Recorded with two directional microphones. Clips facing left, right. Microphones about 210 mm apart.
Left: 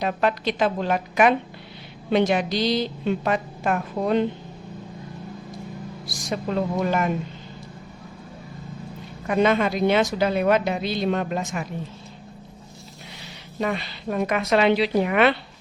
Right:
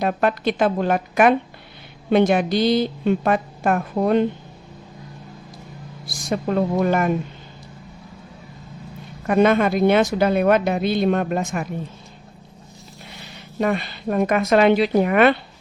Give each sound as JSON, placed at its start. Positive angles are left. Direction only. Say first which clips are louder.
{"t": 0.0, "sound": "a woman's voice", "louder": "right 3 dB", "side_deg": -50}
{"t": 6.1, "sound": "a woman's voice", "louder": "right 5 dB", "side_deg": -50}
{"t": 9.2, "sound": "a woman's voice", "louder": "right 4 dB", "side_deg": -50}
{"t": 13.6, "sound": "a woman's voice", "louder": "right 5 dB", "side_deg": -50}